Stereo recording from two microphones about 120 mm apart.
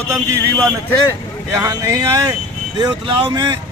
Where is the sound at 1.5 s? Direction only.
30° right (ahead or behind).